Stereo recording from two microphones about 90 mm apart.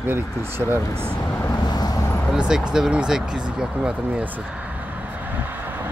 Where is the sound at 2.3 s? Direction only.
10° right (ahead or behind).